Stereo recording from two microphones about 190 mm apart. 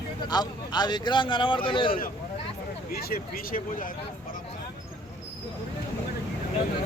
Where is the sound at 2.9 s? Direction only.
50° left (ahead or behind).